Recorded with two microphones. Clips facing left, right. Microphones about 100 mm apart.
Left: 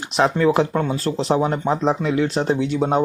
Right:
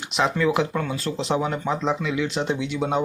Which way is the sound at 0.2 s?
40° left (ahead or behind).